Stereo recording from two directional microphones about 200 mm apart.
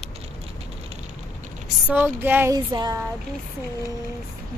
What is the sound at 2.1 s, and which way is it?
Speech, 10° right (ahead or behind).